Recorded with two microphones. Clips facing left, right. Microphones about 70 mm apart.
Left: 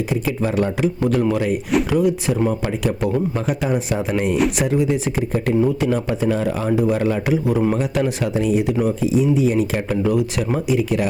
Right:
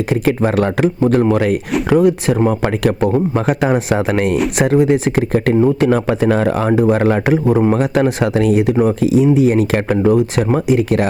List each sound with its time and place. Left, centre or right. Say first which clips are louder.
0.1 s speech: right 6 dB; right
1.0 s speech: right 6 dB; right
4.5 s speech: right 6 dB; right
9.0 s speech: right 5 dB; right
10.0 s speech: right 6 dB; right